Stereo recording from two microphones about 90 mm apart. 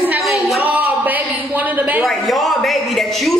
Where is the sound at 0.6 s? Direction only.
20° right (ahead or behind).